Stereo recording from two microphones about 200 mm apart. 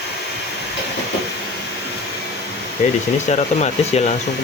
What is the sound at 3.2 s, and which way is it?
Speech, 35° left (ahead or behind).